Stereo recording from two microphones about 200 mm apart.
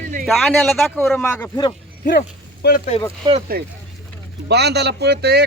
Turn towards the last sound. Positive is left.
turn(degrees=-55)  # may be behind; listen again after turning